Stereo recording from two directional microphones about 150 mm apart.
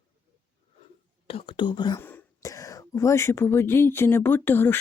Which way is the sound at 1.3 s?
40° left (ahead or behind).